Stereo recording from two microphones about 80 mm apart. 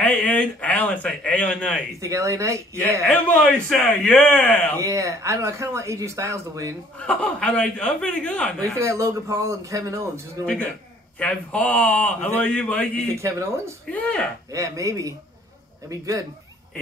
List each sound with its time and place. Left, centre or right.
0.0 s speech: centre
2.0 s speech: right
3.0 s speech: centre
4.7 s speech: right
7.0 s speech: centre
8.7 s speech: right
10.4 s speech: centre
13.1 s speech: right
13.9 s speech: centre
14.5 s chopping: right